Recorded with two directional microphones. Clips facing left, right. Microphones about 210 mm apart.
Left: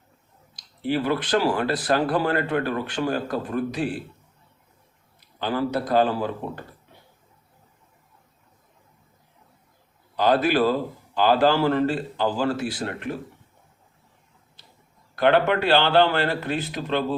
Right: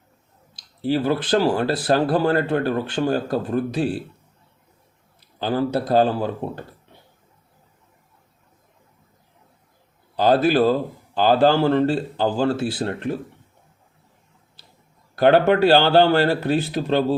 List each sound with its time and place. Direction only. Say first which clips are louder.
0.5 s speech: right 3 dB; 30° right (ahead or behind)
5.4 s a man's voice: right 3 dB; 30° right (ahead or behind)
10.2 s speech: right 3 dB; 30° right (ahead or behind)
15.1 s a man's voice: right 4 dB; 35° right (ahead or behind)